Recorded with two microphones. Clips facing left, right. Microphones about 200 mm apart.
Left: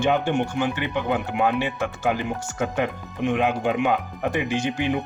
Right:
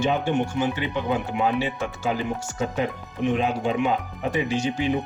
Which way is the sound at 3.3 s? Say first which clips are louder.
Left 3 dB; 55° left (ahead or behind).